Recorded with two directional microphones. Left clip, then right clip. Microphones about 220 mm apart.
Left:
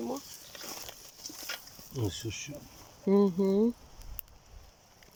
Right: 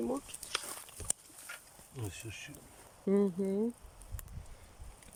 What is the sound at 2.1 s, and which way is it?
Speech, 15° left (ahead or behind).